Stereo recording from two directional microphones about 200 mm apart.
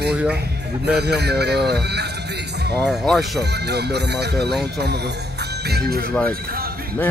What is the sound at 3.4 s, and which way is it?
Speech, 55° right (ahead or behind).